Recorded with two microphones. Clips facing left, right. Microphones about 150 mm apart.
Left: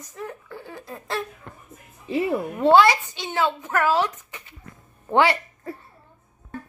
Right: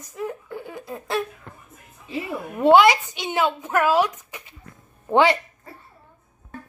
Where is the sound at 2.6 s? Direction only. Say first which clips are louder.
Right 2 dB; 15° right (ahead or behind).